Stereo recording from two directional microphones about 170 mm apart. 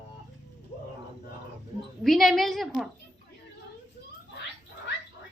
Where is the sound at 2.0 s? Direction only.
Centre (ahead or behind).